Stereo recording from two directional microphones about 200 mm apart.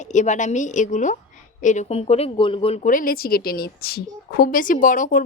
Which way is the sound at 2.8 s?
45° left (ahead or behind).